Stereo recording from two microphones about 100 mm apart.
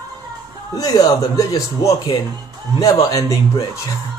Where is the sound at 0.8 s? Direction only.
40° left (ahead or behind).